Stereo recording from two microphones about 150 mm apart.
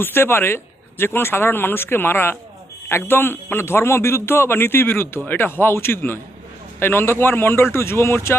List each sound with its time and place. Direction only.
0.0 s a man's voice: 15° left (ahead or behind)